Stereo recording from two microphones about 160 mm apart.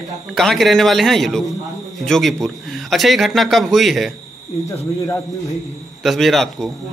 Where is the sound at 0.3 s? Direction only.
Centre (ahead or behind).